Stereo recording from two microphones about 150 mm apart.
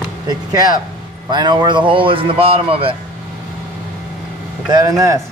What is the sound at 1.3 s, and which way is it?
A man's voice, 30° right (ahead or behind).